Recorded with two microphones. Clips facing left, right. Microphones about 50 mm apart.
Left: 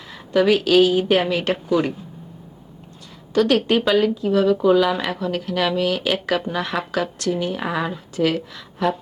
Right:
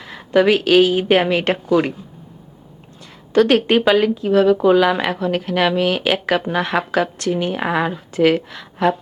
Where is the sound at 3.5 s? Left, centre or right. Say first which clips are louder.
Right 3 dB; right.